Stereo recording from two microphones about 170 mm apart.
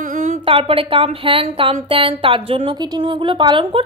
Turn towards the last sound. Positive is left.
turn(degrees=-30)  # may be behind; listen again after turning